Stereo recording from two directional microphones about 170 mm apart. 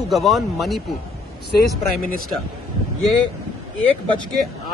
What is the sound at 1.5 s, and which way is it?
Speech, 60° left (ahead or behind).